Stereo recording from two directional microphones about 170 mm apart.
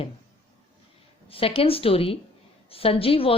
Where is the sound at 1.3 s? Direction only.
35° left (ahead or behind).